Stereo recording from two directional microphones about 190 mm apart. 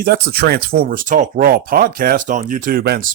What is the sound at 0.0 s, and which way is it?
Speech, 55° right (ahead or behind).